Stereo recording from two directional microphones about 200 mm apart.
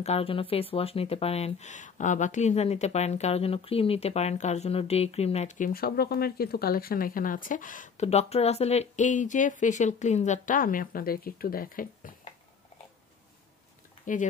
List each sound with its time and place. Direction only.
0.0 s speech: 30° left (ahead or behind)